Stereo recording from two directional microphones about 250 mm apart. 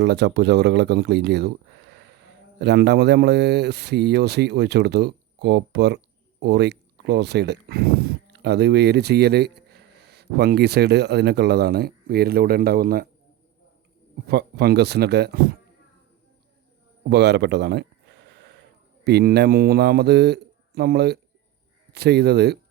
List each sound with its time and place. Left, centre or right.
0.0 s speech: right
14.3 s speech: right
17.0 s a sound: right
19.0 s speech: right